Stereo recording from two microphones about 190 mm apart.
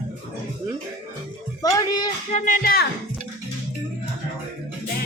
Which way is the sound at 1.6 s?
20° left (ahead or behind).